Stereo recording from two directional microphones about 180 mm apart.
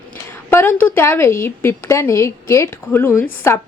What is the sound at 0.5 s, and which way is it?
A woman's voice, 10° left (ahead or behind).